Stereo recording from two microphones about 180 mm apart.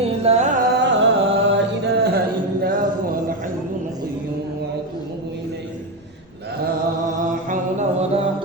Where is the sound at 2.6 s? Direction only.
50° right (ahead or behind).